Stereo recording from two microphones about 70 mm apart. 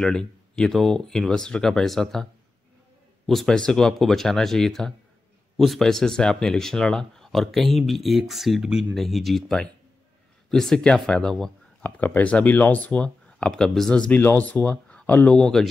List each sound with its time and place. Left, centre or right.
0.0 s speech: centre
3.3 s speech: centre
11.8 s speech: left
15.3 s speech: centre